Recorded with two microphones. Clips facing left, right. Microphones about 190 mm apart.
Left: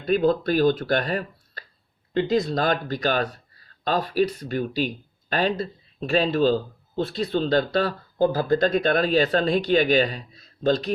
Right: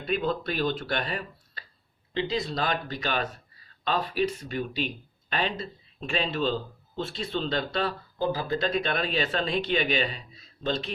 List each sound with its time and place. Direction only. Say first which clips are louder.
0.0 s speech: left 8 dB; 40° left (ahead or behind)